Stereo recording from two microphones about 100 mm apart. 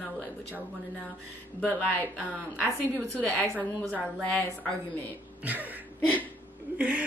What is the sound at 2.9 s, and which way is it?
A woman's voice, 10° left (ahead or behind).